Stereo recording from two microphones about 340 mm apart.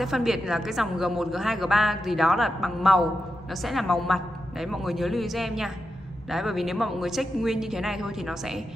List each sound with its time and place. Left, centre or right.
0.0 s a woman's voice: centre